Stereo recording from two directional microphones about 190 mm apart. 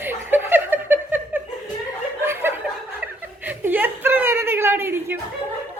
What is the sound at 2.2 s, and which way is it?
Snicker, 10° right (ahead or behind).